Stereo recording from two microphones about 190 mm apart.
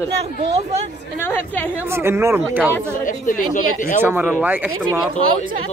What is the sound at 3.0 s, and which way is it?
Speech, 45° left (ahead or behind).